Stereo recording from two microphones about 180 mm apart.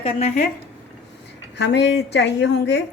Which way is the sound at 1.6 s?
75° left (ahead or behind).